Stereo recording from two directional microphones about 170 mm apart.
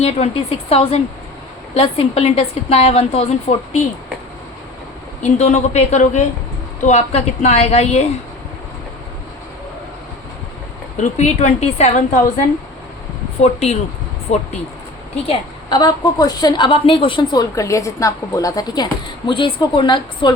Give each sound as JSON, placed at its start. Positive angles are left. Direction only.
{"t": 0.0, "sound": "a woman's voice", "side_deg": 35}
{"t": 5.2, "sound": "a woman's voice", "side_deg": 40}
{"t": 11.0, "sound": "a woman's voice", "side_deg": 40}
{"t": 13.4, "sound": "a woman's voice", "side_deg": 40}
{"t": 15.3, "sound": "a woman's voice", "side_deg": 25}